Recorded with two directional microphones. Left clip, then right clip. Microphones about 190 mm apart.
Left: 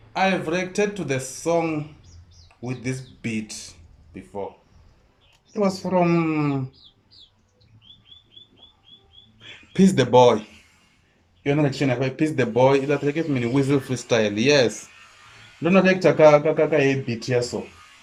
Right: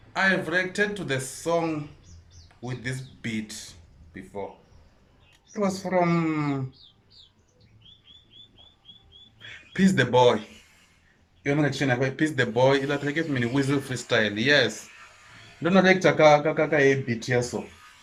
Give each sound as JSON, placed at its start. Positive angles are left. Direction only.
{"t": 0.1, "sound": "speech", "side_deg": 10}
{"t": 5.5, "sound": "speech", "side_deg": 10}
{"t": 9.4, "sound": "speech", "side_deg": 15}
{"t": 11.4, "sound": "speech", "side_deg": 5}